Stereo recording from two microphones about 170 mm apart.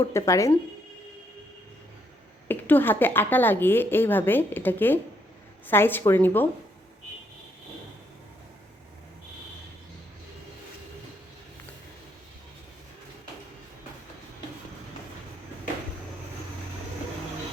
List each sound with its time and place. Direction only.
0.0 s speech: 20° left (ahead or behind)
2.5 s speech: 10° left (ahead or behind)